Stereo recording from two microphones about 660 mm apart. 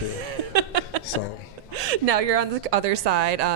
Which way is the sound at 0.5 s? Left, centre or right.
Right.